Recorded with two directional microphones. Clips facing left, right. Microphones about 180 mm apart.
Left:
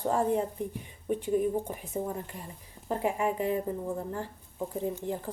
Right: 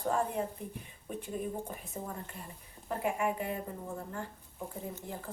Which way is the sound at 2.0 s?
30° left (ahead or behind).